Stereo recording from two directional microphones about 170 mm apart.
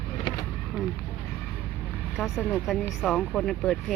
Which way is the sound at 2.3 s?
10° left (ahead or behind).